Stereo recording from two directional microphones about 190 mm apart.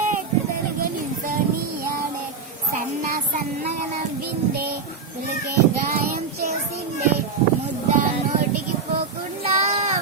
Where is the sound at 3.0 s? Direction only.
45° right (ahead or behind).